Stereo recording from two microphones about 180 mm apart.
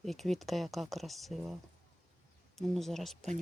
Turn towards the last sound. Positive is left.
turn(degrees=0)  # may be behind; listen again after turning